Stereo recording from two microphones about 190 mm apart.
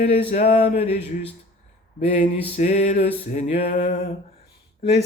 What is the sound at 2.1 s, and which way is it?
Music, 40° left (ahead or behind).